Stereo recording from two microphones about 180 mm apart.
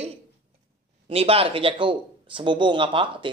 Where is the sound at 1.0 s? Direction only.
30° right (ahead or behind).